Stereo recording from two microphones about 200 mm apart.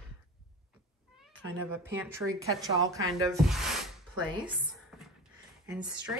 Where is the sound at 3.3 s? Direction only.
Centre (ahead or behind).